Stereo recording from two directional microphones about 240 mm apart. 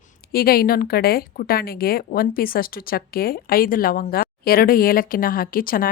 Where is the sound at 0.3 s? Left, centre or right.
Left.